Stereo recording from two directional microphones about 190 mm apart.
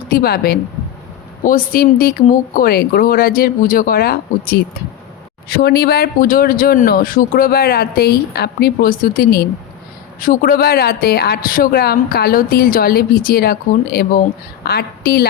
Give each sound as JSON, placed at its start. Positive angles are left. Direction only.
{"t": 0.1, "sound": "a woman's voice", "side_deg": 50}